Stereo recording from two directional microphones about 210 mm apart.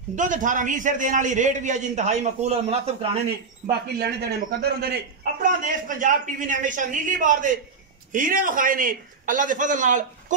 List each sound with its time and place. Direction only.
0.1 s a man's voice: 35° right (ahead or behind)
4.0 s a man's voice: 50° right (ahead or behind)